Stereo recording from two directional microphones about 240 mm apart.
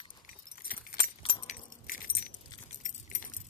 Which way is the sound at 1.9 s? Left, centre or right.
Left.